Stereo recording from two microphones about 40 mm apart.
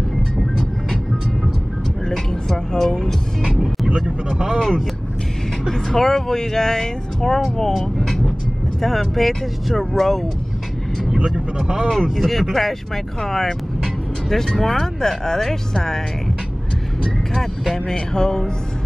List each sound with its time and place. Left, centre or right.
0.4 s music: centre
2.0 s vehicle: centre
2.8 s music: centre
3.9 s vehicle: centre
5.7 s speech: centre
8.8 s speech: centre
11.1 s speech: right
12.2 s speech: centre
17.0 s speech: centre
17.7 s speech: centre